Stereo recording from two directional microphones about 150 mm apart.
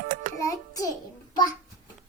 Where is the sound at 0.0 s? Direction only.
65° right (ahead or behind).